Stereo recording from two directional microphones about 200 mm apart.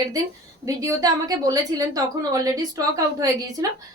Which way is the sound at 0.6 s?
15° right (ahead or behind).